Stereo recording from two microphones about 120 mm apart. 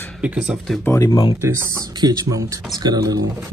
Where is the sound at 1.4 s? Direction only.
20° right (ahead or behind).